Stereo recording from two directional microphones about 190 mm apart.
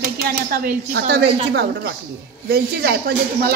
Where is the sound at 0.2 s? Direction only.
50° right (ahead or behind).